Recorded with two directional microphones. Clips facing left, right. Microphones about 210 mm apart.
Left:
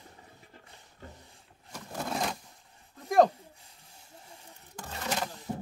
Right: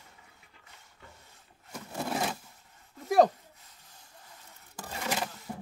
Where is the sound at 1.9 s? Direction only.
5° right (ahead or behind).